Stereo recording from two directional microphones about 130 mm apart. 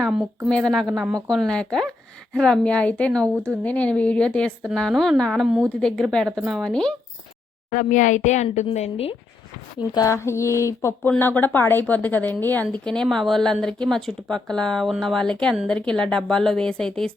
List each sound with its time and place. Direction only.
0.0 s a woman's voice: centre (ahead or behind)
3.3 s speech: 20° right (ahead or behind)
3.6 s a woman's voice: 10° left (ahead or behind)
7.7 s a woman's voice: 75° left (ahead or behind)
8.7 s speech: 55° left (ahead or behind)
9.9 s a sound: 25° left (ahead or behind)
11.2 s a woman's voice: 15° left (ahead or behind)